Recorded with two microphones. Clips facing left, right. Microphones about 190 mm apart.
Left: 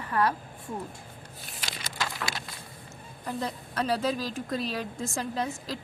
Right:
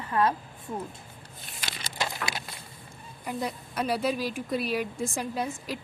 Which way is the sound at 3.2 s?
10° right (ahead or behind).